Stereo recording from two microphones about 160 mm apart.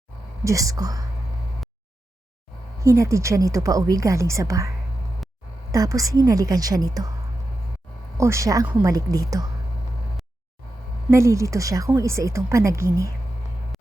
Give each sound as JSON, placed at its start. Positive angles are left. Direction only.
{"t": 0.4, "sound": "speech", "side_deg": -20}
{"t": 2.8, "sound": "speech", "side_deg": -20}
{"t": 5.7, "sound": "speech", "side_deg": -20}
{"t": 8.2, "sound": "speech", "side_deg": -20}
{"t": 11.1, "sound": "speech", "side_deg": -20}